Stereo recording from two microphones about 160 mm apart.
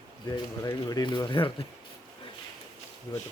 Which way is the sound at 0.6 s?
25° left (ahead or behind).